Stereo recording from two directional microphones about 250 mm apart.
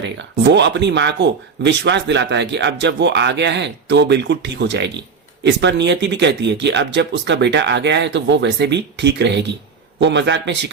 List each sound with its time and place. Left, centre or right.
0.0 s speech: right